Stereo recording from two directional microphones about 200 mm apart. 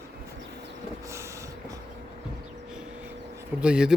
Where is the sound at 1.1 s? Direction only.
15° right (ahead or behind).